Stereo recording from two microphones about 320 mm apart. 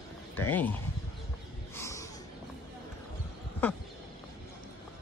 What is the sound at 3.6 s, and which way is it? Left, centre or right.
Speech, centre.